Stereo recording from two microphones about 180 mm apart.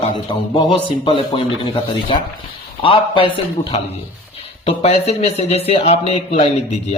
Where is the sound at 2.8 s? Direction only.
30° left (ahead or behind).